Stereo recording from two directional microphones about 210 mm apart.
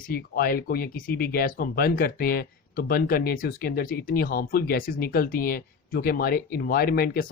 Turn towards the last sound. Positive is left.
turn(degrees=45)  # may be behind; listen again after turning